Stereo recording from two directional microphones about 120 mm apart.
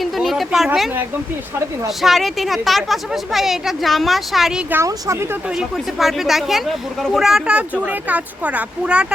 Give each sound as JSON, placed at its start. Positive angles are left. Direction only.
{"t": 0.0, "sound": "a sound", "side_deg": 0}
{"t": 2.0, "sound": "speech", "side_deg": 0}
{"t": 4.7, "sound": "speech", "side_deg": -25}
{"t": 5.5, "sound": "speech", "side_deg": 0}